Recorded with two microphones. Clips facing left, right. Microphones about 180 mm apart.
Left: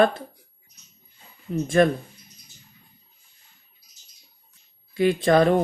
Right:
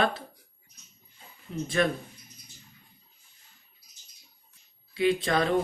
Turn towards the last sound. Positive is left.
turn(degrees=50)  # may be behind; listen again after turning